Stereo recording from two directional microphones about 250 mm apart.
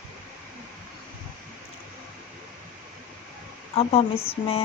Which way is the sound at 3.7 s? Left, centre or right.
Left.